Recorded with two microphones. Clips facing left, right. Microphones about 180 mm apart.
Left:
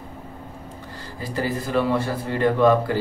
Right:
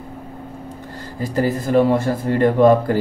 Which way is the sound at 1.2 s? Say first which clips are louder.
Right 6 dB; 45° right (ahead or behind).